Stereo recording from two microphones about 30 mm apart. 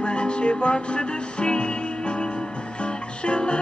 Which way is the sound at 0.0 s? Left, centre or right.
Left.